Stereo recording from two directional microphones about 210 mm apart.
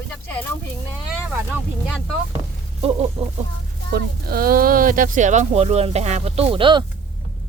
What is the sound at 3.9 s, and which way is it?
Speech, 45° right (ahead or behind).